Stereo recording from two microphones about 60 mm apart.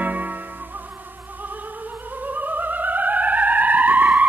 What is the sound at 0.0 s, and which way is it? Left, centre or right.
Music, right.